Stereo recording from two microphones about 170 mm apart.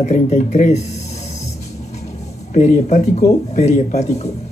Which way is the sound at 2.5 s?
40° left (ahead or behind).